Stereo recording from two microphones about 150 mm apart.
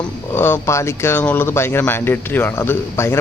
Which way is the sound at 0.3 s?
15° left (ahead or behind).